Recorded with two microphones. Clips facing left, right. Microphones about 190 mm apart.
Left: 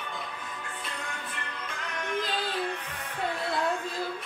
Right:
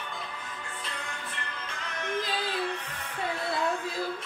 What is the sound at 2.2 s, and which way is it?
Music, 10° right (ahead or behind).